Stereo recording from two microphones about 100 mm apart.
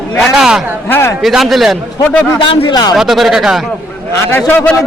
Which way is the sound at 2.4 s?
55° left (ahead or behind).